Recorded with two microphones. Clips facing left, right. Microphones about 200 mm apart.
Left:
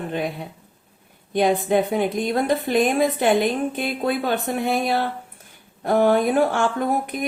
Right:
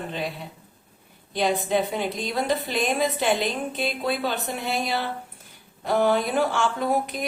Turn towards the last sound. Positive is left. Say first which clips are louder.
# left 2 dB
turn(degrees=55)  # may be behind; listen again after turning